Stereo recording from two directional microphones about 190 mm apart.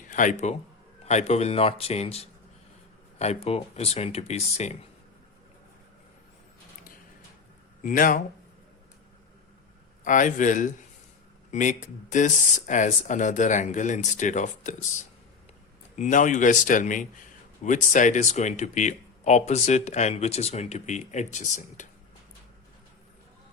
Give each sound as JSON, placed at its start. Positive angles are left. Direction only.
{"t": 0.1, "sound": "a man's voice", "side_deg": 40}
{"t": 7.9, "sound": "speech", "side_deg": 45}
{"t": 10.0, "sound": "speech", "side_deg": 40}